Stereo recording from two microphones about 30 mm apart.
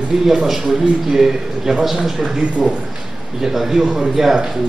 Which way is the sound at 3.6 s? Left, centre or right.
Centre.